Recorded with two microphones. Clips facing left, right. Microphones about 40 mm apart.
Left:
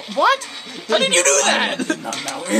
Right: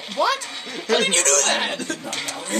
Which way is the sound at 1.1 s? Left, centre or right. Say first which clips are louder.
Left 5 dB; left.